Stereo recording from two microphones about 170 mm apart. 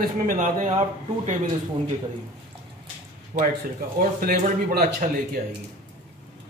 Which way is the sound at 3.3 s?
40° right (ahead or behind).